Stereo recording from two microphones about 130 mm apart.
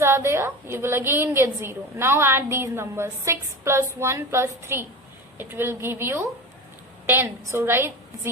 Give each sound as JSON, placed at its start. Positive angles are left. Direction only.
{"t": 0.0, "sound": "a woman's voice", "side_deg": -20}